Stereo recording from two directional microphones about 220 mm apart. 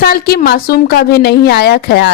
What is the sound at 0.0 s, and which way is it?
A woman's voice, 45° left (ahead or behind).